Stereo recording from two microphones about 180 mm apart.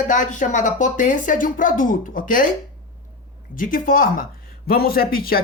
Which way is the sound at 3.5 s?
50° left (ahead or behind).